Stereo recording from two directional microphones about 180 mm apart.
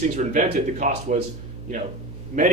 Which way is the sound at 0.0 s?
40° right (ahead or behind).